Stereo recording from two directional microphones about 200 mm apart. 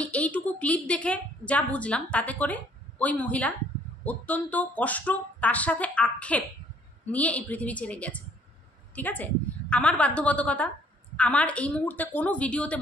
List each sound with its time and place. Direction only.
0.0 s a woman's voice: 5° left (ahead or behind)